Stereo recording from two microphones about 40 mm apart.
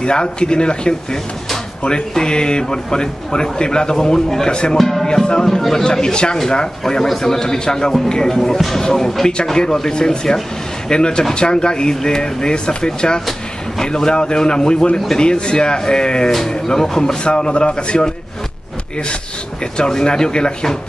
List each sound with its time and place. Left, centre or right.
0.0 s a man's voice: left
4.7 s music: centre
5.0 s music: centre
5.6 s speech: centre
5.9 s a man's voice: centre
8.4 s a man's voice: centre; by 18.1 s left
19.6 s a man's voice: centre